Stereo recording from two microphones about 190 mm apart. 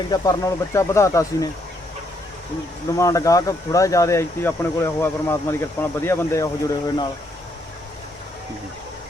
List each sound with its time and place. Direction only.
0.1 s speech: 15° left (ahead or behind)
2.9 s speech: 15° left (ahead or behind)